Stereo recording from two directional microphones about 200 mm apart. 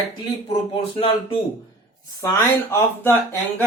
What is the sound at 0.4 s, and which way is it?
Music, 25° left (ahead or behind).